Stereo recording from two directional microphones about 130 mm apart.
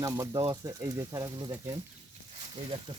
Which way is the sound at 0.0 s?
25° right (ahead or behind).